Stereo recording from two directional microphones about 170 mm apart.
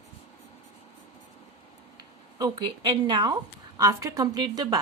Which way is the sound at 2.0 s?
25° right (ahead or behind).